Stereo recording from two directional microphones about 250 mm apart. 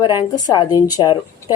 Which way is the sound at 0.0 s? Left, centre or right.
Centre.